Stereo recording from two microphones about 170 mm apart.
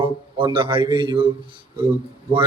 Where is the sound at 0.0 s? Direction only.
30° right (ahead or behind).